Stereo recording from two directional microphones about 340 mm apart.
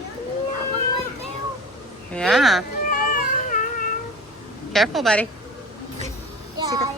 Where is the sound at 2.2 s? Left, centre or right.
Centre.